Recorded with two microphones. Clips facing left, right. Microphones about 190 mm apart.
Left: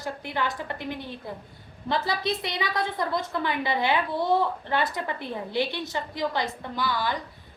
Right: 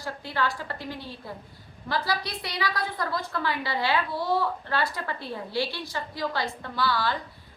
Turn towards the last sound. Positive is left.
turn(degrees=15)  # may be behind; listen again after turning